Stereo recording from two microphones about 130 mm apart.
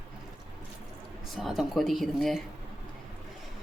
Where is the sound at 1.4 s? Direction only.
Centre (ahead or behind).